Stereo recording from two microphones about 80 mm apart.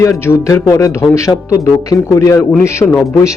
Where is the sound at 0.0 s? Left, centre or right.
Left.